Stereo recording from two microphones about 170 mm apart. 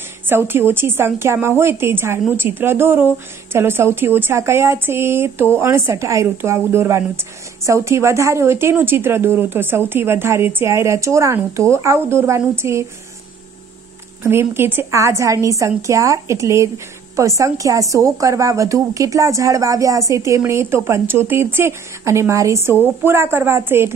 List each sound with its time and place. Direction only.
0.3 s speech: 15° right (ahead or behind)
14.2 s speech: 15° right (ahead or behind)